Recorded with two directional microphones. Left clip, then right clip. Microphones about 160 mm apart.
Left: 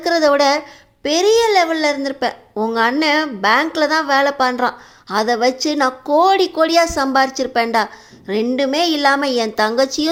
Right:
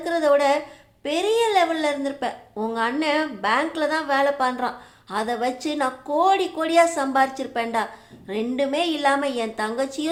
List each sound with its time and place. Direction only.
0.0 s a woman's voice: 35° left (ahead or behind)